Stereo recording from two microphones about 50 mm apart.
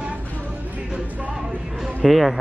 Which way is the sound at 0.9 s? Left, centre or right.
Right.